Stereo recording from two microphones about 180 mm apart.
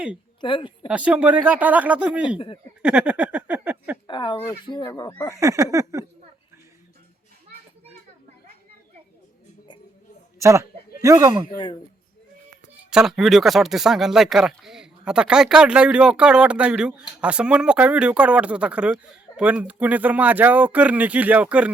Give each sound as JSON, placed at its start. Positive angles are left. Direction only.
{"t": 0.4, "sound": "speech", "side_deg": 25}
{"t": 0.9, "sound": "speech", "side_deg": -5}
{"t": 2.8, "sound": "a sound", "side_deg": -5}
{"t": 4.0, "sound": "speech", "side_deg": 25}
{"t": 5.3, "sound": "speech", "side_deg": -15}
{"t": 10.4, "sound": "speech", "side_deg": -15}
{"t": 11.5, "sound": "speech", "side_deg": 25}
{"t": 12.7, "sound": "speech", "side_deg": -5}